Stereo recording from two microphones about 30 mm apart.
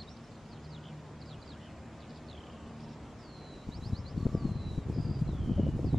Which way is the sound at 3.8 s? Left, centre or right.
Centre.